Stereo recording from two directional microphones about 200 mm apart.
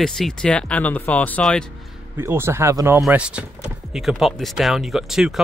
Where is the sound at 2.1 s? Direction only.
10° right (ahead or behind).